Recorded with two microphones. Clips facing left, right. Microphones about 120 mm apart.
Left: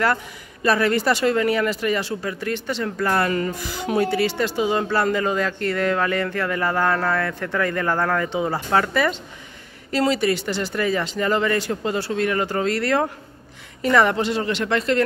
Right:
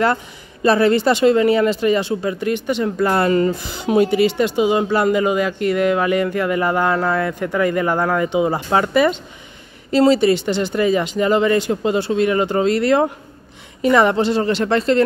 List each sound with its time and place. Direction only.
0.0 s speech: 25° right (ahead or behind)